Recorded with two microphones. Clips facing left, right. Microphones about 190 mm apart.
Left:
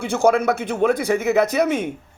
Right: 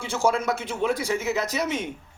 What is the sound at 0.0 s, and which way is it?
A man's voice, 60° left (ahead or behind).